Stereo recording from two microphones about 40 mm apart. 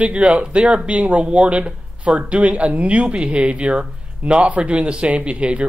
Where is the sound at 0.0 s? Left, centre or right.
Right.